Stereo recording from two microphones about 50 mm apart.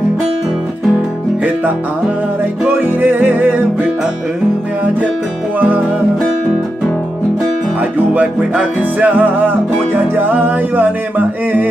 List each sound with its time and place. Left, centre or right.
2.7 s music: right
8.1 s music: right